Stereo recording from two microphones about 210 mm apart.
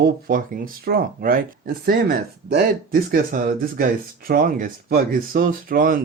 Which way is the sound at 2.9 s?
45° right (ahead or behind).